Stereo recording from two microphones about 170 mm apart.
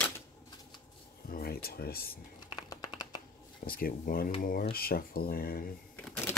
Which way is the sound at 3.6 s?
60° left (ahead or behind).